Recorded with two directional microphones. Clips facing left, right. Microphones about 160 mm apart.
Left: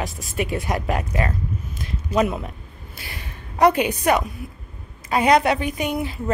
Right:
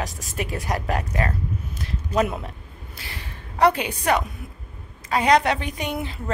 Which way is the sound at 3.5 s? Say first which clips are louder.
Left 3 dB; 15° left (ahead or behind).